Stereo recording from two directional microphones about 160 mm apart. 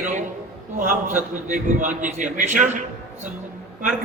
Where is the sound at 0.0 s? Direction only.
50° right (ahead or behind).